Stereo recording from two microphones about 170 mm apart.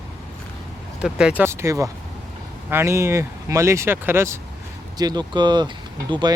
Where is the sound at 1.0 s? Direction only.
5° right (ahead or behind).